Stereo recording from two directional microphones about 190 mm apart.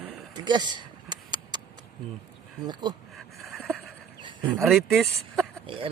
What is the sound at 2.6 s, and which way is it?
Speech, 20° right (ahead or behind).